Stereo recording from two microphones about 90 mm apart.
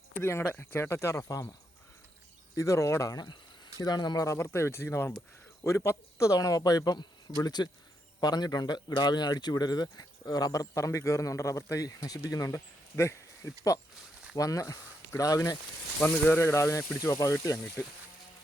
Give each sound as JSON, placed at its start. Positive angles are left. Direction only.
{"t": 0.1, "sound": "speech", "side_deg": 25}
{"t": 2.6, "sound": "speech", "side_deg": 35}
{"t": 3.8, "sound": "speech", "side_deg": 45}
{"t": 4.4, "sound": "speech", "side_deg": 30}
{"t": 16.0, "sound": "speech", "side_deg": 20}